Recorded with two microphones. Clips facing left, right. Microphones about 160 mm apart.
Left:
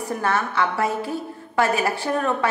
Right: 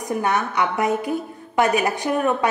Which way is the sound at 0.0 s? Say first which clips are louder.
Right 1 dB; 15° right (ahead or behind).